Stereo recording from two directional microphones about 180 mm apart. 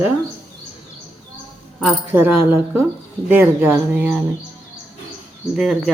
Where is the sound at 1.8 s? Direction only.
5° right (ahead or behind).